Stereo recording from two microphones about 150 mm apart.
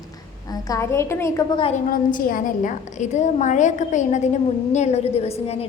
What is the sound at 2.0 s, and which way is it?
A woman's voice, 65° left (ahead or behind).